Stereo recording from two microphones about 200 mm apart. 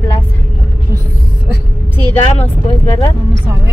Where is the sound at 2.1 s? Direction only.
30° left (ahead or behind).